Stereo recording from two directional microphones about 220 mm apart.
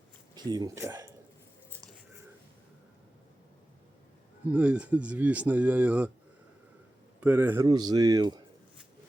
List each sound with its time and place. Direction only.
0.3 s speech: 20° right (ahead or behind)
4.5 s speech: 5° right (ahead or behind)
7.2 s speech: 5° right (ahead or behind)